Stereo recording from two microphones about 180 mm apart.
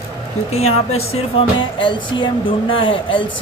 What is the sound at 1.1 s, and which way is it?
Speech, 30° left (ahead or behind).